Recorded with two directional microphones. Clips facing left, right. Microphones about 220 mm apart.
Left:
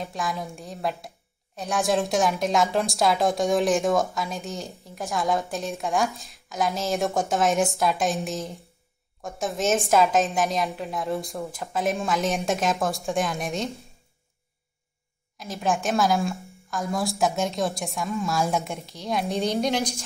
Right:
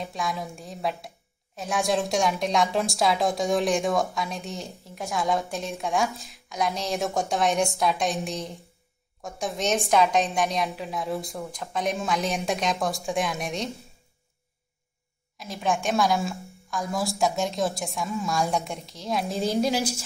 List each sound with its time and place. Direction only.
0.0 s a woman's voice: centre (ahead or behind)
15.3 s a woman's voice: centre (ahead or behind)